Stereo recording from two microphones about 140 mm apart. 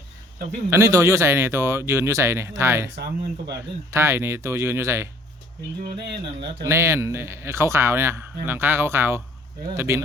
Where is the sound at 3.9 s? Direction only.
20° right (ahead or behind).